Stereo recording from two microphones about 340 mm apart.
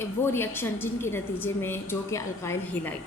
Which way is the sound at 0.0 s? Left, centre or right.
Centre.